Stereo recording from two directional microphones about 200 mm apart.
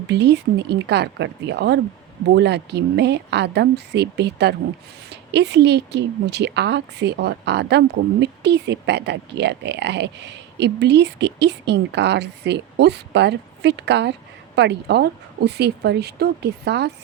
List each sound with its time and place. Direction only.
0.1 s a woman's voice: 60° right (ahead or behind)